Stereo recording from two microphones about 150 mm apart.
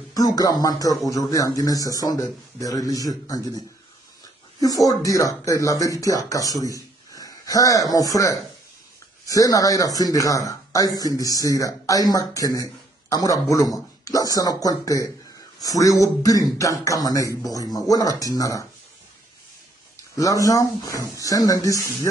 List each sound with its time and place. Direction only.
0.1 s speech: 25° left (ahead or behind)
20.2 s speech: 20° left (ahead or behind)